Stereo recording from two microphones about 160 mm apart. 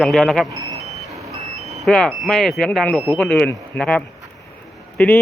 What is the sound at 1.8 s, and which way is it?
A man's voice, 5° left (ahead or behind).